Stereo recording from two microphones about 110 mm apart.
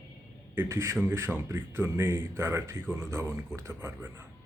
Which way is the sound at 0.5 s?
25° right (ahead or behind).